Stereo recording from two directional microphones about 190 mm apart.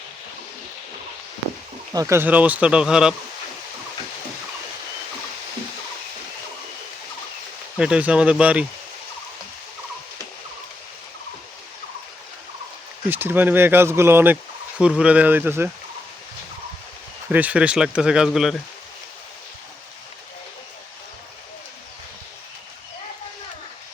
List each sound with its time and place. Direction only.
1.9 s speech: 15° right (ahead or behind)
7.8 s speech: 5° right (ahead or behind)
13.1 s speech: 10° right (ahead or behind)
17.2 s speech: 10° right (ahead or behind)